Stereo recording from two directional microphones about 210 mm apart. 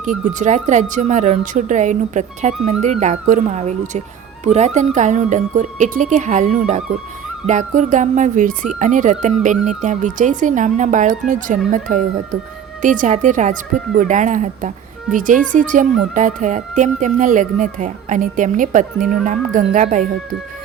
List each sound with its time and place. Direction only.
0.0 s speech: 35° right (ahead or behind)